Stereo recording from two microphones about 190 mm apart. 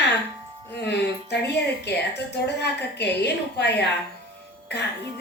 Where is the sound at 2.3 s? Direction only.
60° left (ahead or behind).